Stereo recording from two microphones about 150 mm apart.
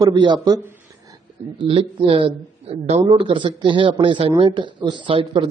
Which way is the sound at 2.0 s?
40° right (ahead or behind).